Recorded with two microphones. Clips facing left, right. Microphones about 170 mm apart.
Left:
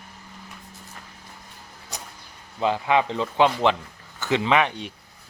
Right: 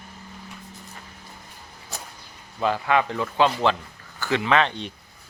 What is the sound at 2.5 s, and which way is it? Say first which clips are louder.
A woman's voice: left 1 dB; 20° left (ahead or behind).